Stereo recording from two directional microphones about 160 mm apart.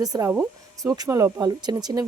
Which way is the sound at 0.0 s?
20° right (ahead or behind).